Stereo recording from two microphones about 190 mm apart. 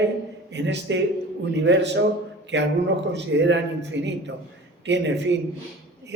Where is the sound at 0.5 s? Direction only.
65° right (ahead or behind).